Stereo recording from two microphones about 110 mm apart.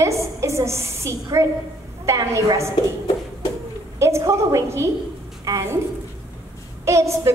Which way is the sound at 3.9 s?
25° right (ahead or behind).